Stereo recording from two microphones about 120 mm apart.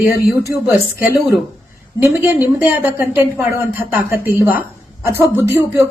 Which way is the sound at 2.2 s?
15° right (ahead or behind).